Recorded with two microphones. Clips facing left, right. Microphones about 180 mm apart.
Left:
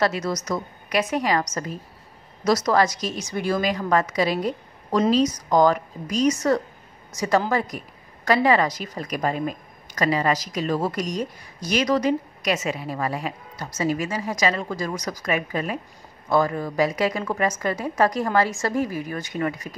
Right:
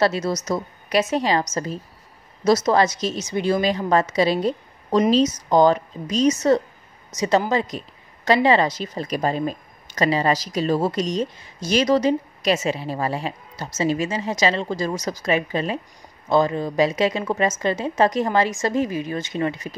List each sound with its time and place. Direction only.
0.0 s a woman's voice: 30° right (ahead or behind)